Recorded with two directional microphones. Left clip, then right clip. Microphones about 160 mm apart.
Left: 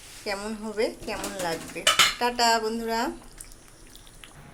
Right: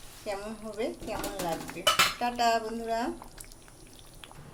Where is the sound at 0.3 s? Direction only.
20° left (ahead or behind).